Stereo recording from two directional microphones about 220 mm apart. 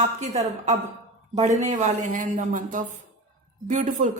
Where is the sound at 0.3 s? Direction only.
30° right (ahead or behind).